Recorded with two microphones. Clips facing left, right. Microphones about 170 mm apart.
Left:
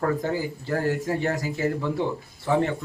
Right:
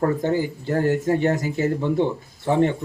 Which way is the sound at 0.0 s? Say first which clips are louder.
Right 4 dB; 25° right (ahead or behind).